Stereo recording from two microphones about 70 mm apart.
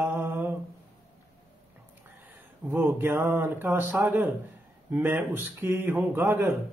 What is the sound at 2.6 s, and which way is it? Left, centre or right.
A man's voice, right.